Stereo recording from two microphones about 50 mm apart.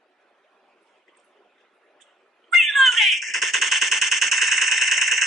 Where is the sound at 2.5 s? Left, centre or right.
Centre.